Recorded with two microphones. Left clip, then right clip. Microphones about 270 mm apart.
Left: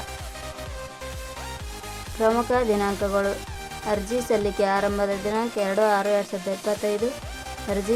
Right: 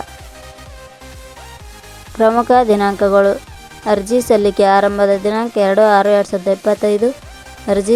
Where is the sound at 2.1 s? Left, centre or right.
Right.